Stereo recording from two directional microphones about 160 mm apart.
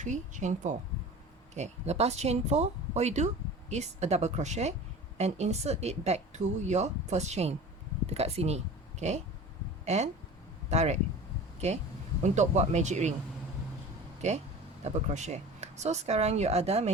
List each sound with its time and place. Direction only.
0.0 s speech: 50° right (ahead or behind)
14.2 s speech: 45° right (ahead or behind)